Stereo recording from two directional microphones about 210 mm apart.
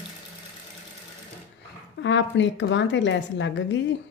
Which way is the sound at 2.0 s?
60° left (ahead or behind).